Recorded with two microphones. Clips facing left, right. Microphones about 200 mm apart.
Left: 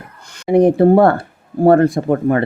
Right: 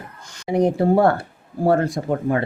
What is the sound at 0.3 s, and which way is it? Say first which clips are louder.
Speech: left 7 dB; 60° left (ahead or behind).